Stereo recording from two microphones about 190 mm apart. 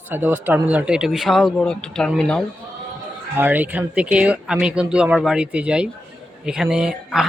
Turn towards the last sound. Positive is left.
turn(degrees=-5)  # may be behind; listen again after turning